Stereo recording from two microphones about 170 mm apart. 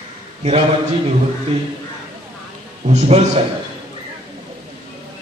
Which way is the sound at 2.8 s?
40° right (ahead or behind).